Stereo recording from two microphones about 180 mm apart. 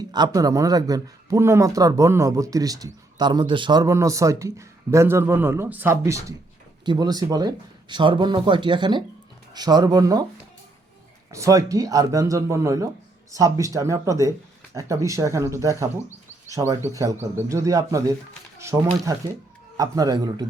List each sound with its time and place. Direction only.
0.0 s a man's voice: 25° right (ahead or behind)
11.3 s a man's voice: 15° right (ahead or behind)